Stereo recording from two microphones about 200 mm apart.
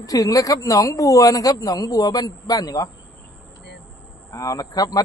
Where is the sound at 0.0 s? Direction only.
15° left (ahead or behind).